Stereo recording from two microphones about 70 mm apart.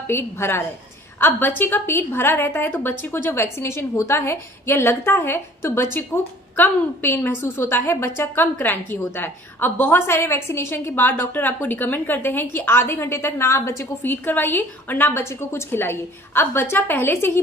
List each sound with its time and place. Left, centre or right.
0.0 s a woman's voice: left
14.1 s a woman's voice: left